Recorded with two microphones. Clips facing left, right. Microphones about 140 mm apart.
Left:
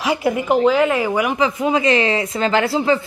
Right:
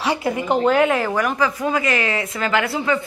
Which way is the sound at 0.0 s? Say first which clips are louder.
Left 2 dB; 10° left (ahead or behind).